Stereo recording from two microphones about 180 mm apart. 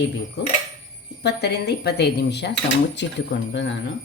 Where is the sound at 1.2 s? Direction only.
65° left (ahead or behind); by 3.8 s 90° left.